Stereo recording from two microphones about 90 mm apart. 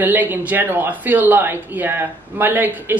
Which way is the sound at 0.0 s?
20° right (ahead or behind).